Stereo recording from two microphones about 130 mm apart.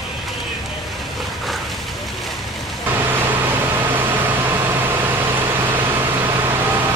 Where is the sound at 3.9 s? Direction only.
15° right (ahead or behind).